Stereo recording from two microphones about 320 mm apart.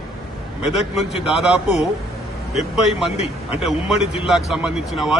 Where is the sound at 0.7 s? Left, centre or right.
Centre.